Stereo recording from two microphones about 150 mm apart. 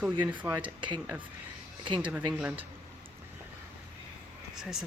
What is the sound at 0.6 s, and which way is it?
Speech, 35° right (ahead or behind).